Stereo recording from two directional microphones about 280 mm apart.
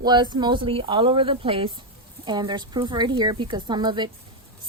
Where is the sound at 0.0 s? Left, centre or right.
Centre.